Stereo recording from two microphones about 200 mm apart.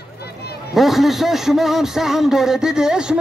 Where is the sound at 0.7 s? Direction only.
Centre (ahead or behind).